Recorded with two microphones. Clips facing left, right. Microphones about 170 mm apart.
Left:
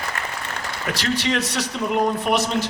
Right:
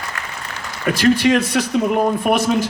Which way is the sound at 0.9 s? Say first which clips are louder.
Right 9 dB; 55° right (ahead or behind).